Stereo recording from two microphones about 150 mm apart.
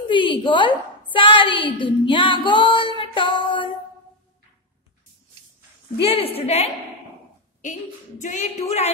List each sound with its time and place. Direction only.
0.1 s music: 35° left (ahead or behind)
6.0 s music: 40° left (ahead or behind)
7.6 s a woman's voice: 55° left (ahead or behind)
8.2 s music: 55° left (ahead or behind)